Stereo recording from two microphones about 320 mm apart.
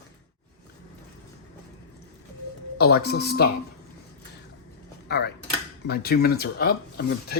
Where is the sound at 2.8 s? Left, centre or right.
Left.